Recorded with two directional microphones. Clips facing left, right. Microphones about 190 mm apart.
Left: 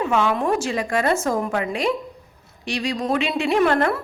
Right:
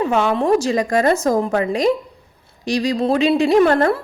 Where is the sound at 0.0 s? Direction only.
35° right (ahead or behind).